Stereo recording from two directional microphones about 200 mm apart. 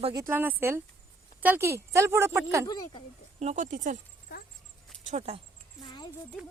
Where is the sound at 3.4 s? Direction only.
35° right (ahead or behind).